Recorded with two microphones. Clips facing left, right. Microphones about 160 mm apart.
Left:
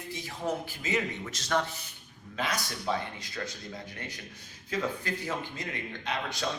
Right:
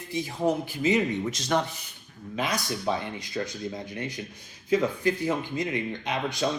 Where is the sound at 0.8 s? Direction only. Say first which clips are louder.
Right 8 dB; 15° right (ahead or behind).